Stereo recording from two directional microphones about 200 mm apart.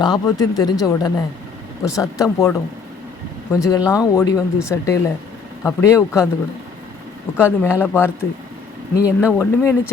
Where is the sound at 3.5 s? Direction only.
15° left (ahead or behind).